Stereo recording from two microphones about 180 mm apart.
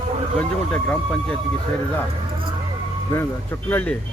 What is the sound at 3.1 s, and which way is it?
Speech, 10° left (ahead or behind).